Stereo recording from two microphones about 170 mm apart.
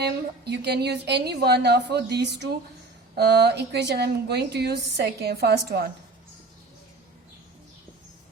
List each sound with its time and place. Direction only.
0.0 s speech: 75° right (ahead or behind)